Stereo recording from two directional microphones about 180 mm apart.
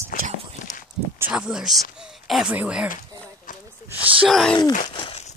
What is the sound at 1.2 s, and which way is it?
Speech, 5° right (ahead or behind).